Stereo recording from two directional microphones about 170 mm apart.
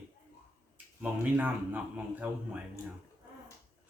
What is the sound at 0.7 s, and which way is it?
Speech, 10° right (ahead or behind).